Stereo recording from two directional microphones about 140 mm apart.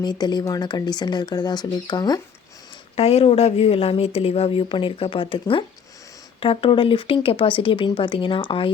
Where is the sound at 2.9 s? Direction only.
45° left (ahead or behind).